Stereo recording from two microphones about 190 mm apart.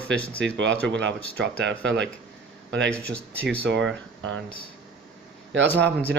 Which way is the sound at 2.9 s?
5° left (ahead or behind).